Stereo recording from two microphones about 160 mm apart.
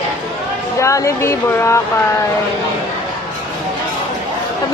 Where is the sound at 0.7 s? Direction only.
20° left (ahead or behind).